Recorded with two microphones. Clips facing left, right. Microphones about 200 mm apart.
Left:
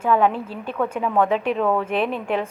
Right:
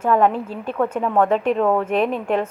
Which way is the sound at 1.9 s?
Centre (ahead or behind).